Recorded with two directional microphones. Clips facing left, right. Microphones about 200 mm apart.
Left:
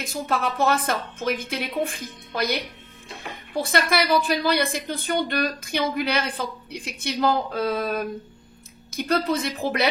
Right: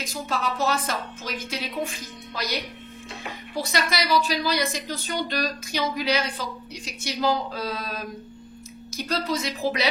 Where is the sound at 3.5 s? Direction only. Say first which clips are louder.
Left 4 dB; 55° left (ahead or behind).